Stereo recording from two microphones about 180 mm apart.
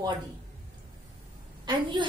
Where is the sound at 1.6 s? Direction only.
25° right (ahead or behind).